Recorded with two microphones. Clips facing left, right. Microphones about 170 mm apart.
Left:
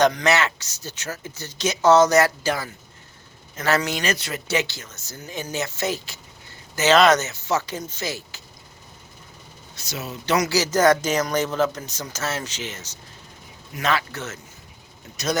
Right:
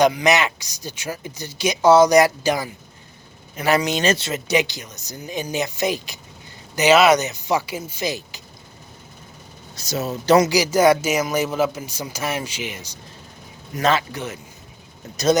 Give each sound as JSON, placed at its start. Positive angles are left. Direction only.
{"t": 0.0, "sound": "speech", "side_deg": -10}
{"t": 9.7, "sound": "speech", "side_deg": -40}
{"t": 10.5, "sound": "speech", "side_deg": -10}